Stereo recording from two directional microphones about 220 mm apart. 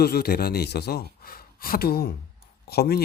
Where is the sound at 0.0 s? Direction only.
45° left (ahead or behind).